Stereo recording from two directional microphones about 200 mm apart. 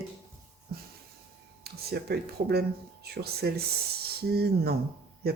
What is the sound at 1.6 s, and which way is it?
Speech, 50° right (ahead or behind).